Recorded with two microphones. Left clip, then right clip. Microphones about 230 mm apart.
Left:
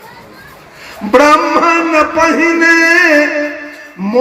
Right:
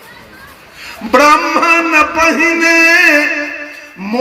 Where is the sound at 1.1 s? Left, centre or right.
Right.